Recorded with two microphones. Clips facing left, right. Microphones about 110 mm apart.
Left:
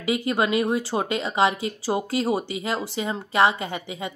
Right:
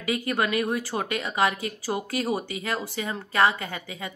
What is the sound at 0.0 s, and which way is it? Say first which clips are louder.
Speech: left 3 dB; 25° left (ahead or behind).